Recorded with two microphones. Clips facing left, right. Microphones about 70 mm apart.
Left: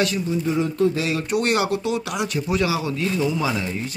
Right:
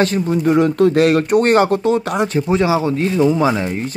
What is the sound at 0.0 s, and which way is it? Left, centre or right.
Speech, right.